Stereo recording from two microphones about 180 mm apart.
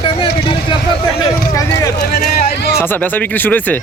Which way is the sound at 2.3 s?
70° left (ahead or behind).